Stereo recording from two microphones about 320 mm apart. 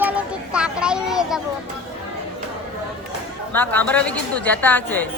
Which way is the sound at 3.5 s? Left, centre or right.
Centre.